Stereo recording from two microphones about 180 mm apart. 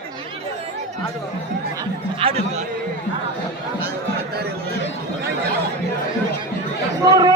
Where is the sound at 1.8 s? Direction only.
30° right (ahead or behind).